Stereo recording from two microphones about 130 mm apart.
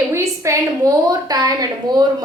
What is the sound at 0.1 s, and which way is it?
A woman's voice, 20° right (ahead or behind).